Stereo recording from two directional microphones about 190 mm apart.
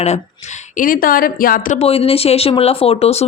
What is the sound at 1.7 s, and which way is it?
Speech, 30° left (ahead or behind).